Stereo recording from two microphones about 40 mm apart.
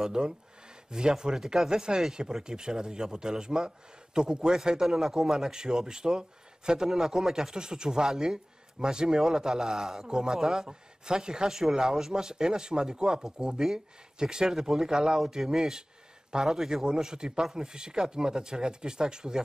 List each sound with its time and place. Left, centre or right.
0.0 s a man's voice: centre